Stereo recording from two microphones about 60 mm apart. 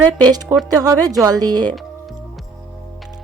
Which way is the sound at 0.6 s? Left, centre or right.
Right.